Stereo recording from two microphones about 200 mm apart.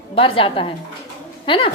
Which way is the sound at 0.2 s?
25° left (ahead or behind).